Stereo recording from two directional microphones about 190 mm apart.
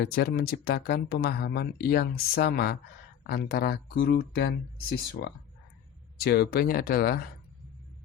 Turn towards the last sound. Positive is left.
turn(degrees=55)  # may be behind; listen again after turning